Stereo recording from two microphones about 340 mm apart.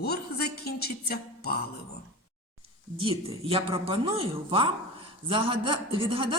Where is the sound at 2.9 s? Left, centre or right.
Centre.